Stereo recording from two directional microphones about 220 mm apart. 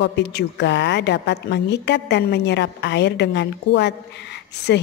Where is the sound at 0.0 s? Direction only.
50° left (ahead or behind).